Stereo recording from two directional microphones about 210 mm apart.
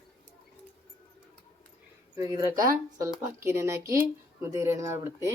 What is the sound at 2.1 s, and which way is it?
Speech, 15° right (ahead or behind).